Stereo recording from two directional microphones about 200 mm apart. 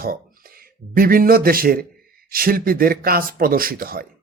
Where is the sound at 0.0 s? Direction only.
50° right (ahead or behind).